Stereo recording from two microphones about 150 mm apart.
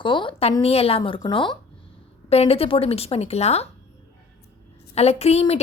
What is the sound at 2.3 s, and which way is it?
A woman's voice, 40° left (ahead or behind).